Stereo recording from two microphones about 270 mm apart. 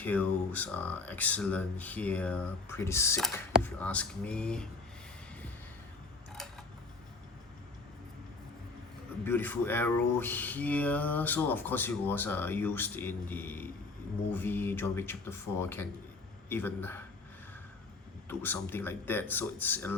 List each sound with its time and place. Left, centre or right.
0.0 s speech: centre
9.2 s speech: centre
18.3 s speech: centre